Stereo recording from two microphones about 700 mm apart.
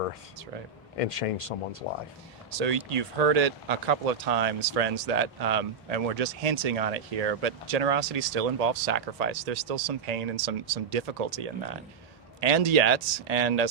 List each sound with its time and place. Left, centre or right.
0.9 s speech: left
2.6 s speech: right